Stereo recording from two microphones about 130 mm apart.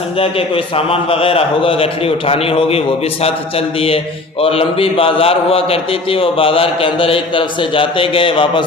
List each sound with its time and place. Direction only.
0.2 s mantra: 45° left (ahead or behind)